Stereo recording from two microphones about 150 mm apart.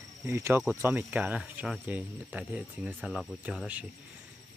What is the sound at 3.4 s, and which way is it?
Speech, 10° right (ahead or behind).